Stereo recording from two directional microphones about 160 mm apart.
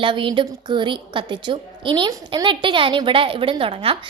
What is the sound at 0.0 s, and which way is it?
A woman's voice, 30° right (ahead or behind).